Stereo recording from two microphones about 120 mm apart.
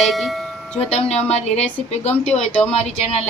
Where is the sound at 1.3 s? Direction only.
65° left (ahead or behind).